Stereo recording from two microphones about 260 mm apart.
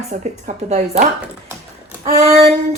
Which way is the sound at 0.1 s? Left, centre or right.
Right.